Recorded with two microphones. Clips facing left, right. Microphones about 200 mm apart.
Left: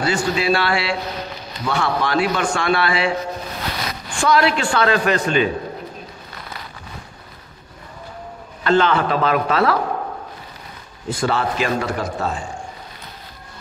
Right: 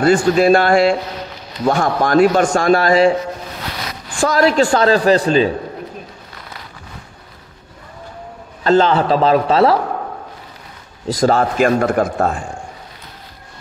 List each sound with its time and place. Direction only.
0.0 s a man's voice: 50° right (ahead or behind)
4.2 s a man's voice: 40° right (ahead or behind)
8.6 s a man's voice: 35° right (ahead or behind)
11.1 s a man's voice: 40° right (ahead or behind)